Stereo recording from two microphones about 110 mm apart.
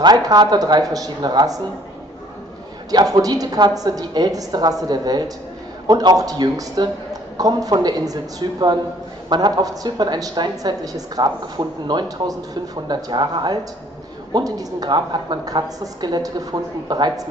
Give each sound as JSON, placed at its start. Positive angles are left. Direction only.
{"t": 0.0, "sound": "a woman's voice", "side_deg": -35}
{"t": 2.9, "sound": "a woman's voice", "side_deg": -35}